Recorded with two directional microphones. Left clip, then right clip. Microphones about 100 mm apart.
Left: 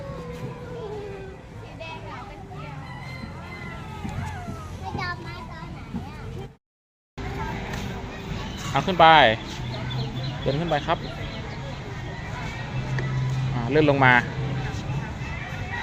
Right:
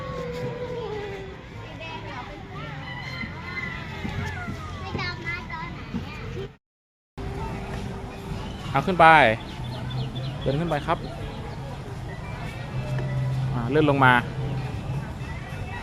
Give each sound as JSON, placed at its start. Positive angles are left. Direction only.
{"t": 8.7, "sound": "speech", "side_deg": -50}
{"t": 10.4, "sound": "speech", "side_deg": -45}
{"t": 13.7, "sound": "speech", "side_deg": -35}